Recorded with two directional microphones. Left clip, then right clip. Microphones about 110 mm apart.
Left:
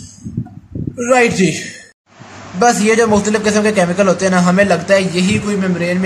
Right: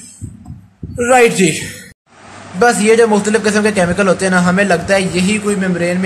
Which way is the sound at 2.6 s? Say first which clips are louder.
Right 2 dB; 5° right (ahead or behind).